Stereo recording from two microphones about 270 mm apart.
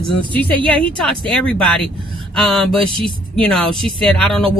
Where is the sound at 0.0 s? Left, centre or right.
Centre.